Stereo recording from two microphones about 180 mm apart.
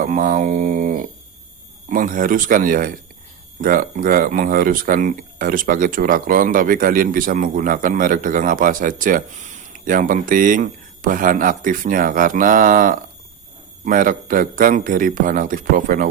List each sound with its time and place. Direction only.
0.0 s speech: 50° right (ahead or behind)